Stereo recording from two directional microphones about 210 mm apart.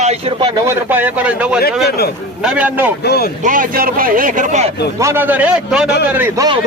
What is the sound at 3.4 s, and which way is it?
Speech, 40° right (ahead or behind).